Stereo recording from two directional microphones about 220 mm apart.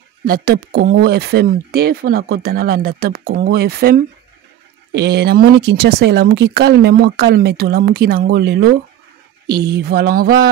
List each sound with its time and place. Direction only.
0.2 s speech: 45° right (ahead or behind)